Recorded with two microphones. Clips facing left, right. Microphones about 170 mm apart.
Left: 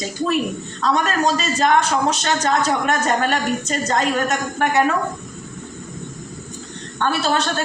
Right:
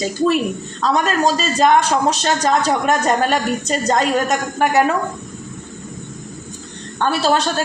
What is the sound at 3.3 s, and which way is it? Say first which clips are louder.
Speech: right 2 dB; 35° right (ahead or behind).